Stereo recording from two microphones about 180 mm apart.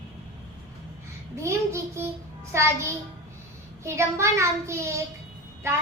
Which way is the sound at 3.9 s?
15° right (ahead or behind).